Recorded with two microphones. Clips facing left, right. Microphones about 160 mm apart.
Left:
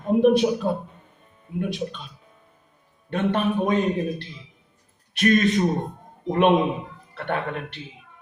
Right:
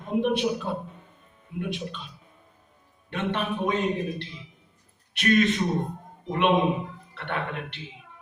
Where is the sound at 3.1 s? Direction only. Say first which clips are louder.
Left 6 dB; 45° left (ahead or behind).